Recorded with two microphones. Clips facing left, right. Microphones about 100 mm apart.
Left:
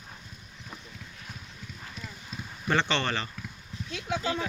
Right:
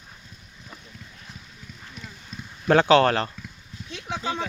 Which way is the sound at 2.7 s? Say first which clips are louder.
Right 11 dB; 45° right (ahead or behind).